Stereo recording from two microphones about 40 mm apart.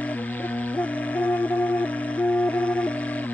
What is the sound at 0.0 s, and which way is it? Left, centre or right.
Music, left.